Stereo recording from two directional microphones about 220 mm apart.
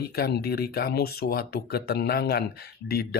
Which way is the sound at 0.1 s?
45° left (ahead or behind).